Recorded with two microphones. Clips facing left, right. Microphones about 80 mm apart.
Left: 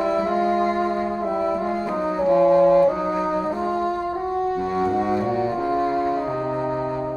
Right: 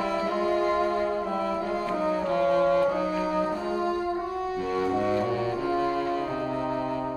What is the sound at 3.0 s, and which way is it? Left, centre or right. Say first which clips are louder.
Brass instrument: left 4 dB; left.